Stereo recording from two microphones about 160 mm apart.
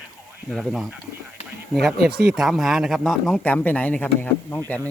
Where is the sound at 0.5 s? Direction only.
Centre (ahead or behind).